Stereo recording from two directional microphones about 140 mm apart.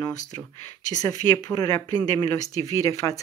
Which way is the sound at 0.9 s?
25° left (ahead or behind).